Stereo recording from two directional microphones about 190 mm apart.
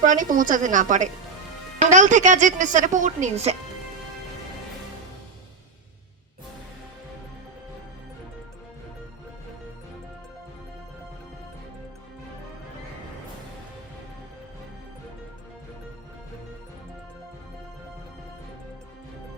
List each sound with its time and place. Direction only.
0.0 s a woman's voice: 45° right (ahead or behind)